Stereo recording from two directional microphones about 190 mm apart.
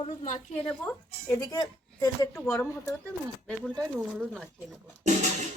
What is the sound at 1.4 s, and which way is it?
Speech, 15° left (ahead or behind).